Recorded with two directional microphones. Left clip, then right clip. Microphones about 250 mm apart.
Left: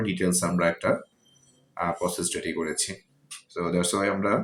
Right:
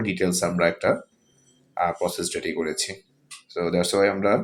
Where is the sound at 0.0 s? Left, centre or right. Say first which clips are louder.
Right 3 dB; centre.